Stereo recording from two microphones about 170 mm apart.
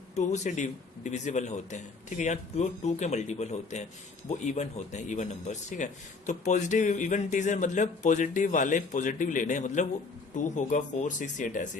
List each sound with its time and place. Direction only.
0.2 s a man's voice: 45° left (ahead or behind)